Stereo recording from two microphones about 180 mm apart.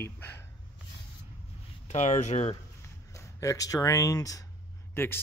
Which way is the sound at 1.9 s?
40° left (ahead or behind).